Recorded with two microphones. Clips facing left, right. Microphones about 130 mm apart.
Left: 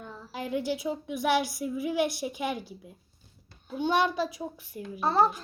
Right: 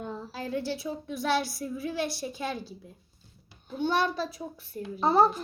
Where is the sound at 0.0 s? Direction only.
20° right (ahead or behind).